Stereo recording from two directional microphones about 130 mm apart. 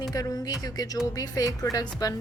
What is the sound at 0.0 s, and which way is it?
A woman's voice, 30° left (ahead or behind).